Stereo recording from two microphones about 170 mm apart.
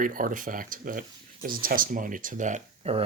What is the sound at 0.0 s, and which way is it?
Speech, 55° right (ahead or behind).